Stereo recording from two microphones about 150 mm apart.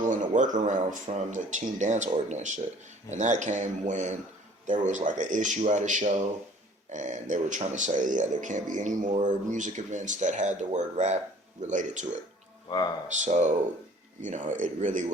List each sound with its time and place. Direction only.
0.0 s speech: 60° right (ahead or behind)
13.1 s speech: 55° right (ahead or behind)